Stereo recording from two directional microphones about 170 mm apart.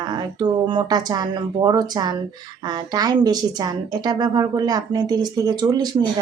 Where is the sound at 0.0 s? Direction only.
25° right (ahead or behind).